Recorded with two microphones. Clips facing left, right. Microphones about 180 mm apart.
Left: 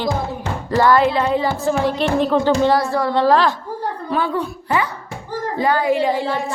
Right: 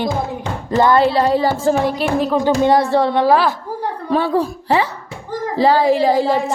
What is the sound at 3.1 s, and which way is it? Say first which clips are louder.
Music: left 2 dB; 10° right (ahead or behind).